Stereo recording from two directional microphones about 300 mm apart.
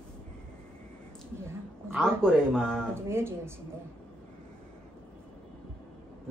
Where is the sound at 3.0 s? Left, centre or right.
Centre.